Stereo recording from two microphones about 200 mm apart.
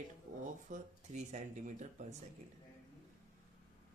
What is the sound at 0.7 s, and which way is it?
Speech, 35° right (ahead or behind).